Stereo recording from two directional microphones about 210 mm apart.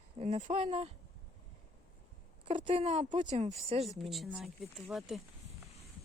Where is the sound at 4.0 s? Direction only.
Centre (ahead or behind).